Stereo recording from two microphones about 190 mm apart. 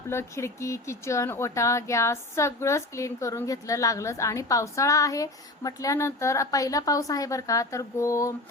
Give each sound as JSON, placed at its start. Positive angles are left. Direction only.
{"t": 0.1, "sound": "speech", "side_deg": 15}